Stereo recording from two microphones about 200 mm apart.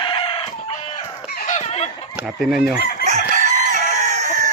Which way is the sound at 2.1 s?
5° right (ahead or behind).